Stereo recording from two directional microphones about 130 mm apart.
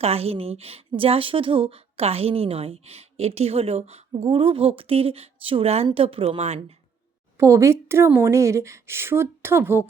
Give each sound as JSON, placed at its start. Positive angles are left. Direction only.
{"t": 0.0, "sound": "a woman's voice", "side_deg": -50}
{"t": 7.3, "sound": "speech", "side_deg": -20}